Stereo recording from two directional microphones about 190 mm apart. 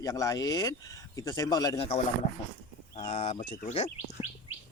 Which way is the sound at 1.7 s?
30° left (ahead or behind).